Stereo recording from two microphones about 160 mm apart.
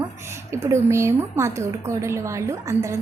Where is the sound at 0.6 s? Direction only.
15° right (ahead or behind).